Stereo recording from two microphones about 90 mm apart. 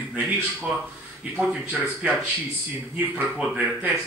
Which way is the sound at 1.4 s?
15° right (ahead or behind).